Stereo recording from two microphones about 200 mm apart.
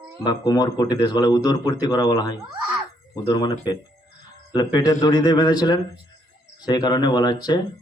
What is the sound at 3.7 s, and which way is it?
Speech, 20° left (ahead or behind).